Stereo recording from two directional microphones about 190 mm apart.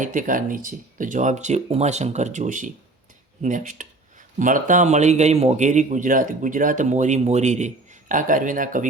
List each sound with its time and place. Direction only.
0.0 s a man's voice: 45° right (ahead or behind)